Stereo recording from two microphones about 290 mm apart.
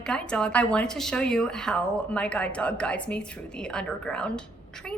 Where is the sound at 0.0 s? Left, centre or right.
Centre.